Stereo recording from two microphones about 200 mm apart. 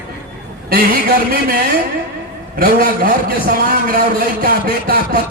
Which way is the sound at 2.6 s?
45° right (ahead or behind).